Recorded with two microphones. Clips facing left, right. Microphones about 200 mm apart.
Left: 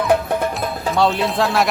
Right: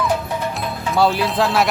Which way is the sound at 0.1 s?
55° left (ahead or behind).